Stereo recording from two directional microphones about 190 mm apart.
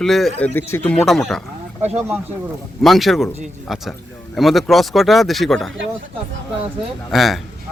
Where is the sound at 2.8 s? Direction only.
Centre (ahead or behind).